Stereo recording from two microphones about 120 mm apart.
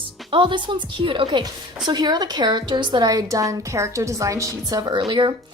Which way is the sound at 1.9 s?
35° right (ahead or behind).